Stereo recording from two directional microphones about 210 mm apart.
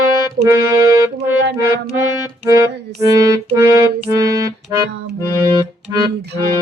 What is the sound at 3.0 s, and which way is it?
Music, 15° right (ahead or behind).